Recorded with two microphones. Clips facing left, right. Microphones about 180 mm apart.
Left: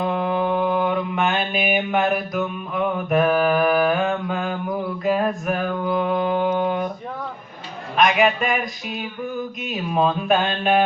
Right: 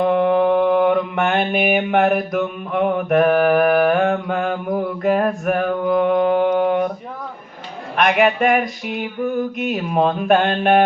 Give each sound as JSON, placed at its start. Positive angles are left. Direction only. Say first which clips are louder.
{"t": 0.0, "sound": "mantra", "louder": "right 7 dB", "side_deg": -60}
{"t": 8.4, "sound": "speech", "louder": "right 7 dB", "side_deg": -55}